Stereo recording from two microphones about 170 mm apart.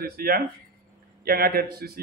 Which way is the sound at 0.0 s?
65° right (ahead or behind).